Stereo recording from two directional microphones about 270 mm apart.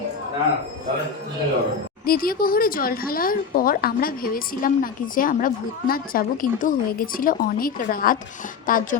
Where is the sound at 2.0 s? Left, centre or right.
Left.